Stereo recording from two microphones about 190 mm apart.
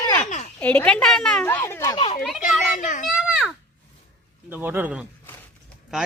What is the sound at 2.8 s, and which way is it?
Speech, 40° left (ahead or behind).